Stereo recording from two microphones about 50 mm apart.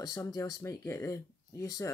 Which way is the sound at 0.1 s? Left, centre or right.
Left.